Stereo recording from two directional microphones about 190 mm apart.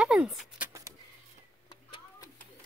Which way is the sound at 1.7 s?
20° left (ahead or behind).